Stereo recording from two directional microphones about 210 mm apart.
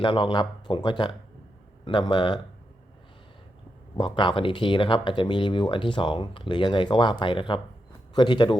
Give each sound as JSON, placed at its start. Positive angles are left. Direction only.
{"t": 0.0, "sound": "speech", "side_deg": 25}
{"t": 3.9, "sound": "speech", "side_deg": 25}